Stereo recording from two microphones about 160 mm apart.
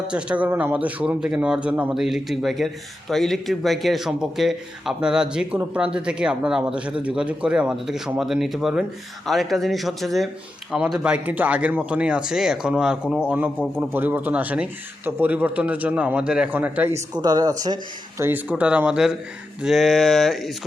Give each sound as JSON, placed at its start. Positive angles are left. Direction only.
{"t": 0.1, "sound": "a man's voice", "side_deg": -5}
{"t": 17.2, "sound": "speech", "side_deg": -25}
{"t": 18.2, "sound": "a man's voice", "side_deg": -10}